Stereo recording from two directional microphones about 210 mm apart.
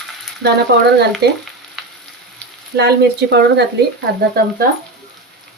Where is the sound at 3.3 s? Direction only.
55° right (ahead or behind).